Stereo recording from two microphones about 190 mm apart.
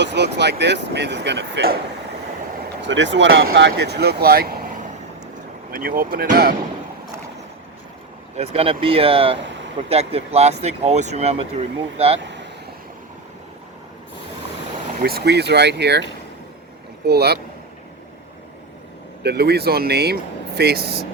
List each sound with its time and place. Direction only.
0.0 s speech: 65° right (ahead or behind)
2.8 s speech: 70° right (ahead or behind)
3.7 s speech: 60° right (ahead or behind)
8.4 s speech: 30° right (ahead or behind)
12.2 s vehicle: 70° right (ahead or behind)
15.0 s speech: 55° right (ahead or behind)
17.1 s speech: 60° right (ahead or behind)
19.2 s speech: 60° right (ahead or behind)